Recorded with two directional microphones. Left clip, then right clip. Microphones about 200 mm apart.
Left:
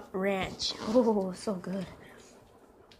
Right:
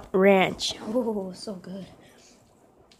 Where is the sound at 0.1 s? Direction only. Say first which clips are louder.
Right 12 dB; 40° right (ahead or behind).